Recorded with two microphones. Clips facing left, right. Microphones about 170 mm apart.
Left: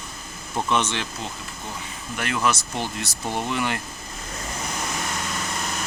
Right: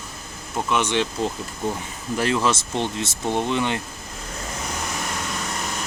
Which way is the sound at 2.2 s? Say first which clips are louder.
Right 3 dB; 30° right (ahead or behind).